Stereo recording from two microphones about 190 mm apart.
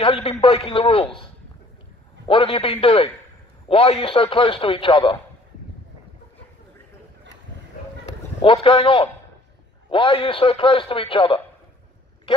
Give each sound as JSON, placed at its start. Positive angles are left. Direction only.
{"t": 0.0, "sound": "speech", "side_deg": 35}
{"t": 2.2, "sound": "a man's voice", "side_deg": 30}
{"t": 8.0, "sound": "a sound", "side_deg": 30}
{"t": 9.8, "sound": "a man's voice", "side_deg": 30}